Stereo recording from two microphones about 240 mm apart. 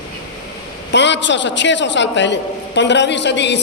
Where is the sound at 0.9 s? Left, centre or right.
Left.